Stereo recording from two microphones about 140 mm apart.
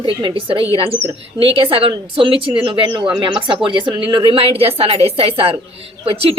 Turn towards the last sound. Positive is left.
turn(degrees=-45)  # may be behind; listen again after turning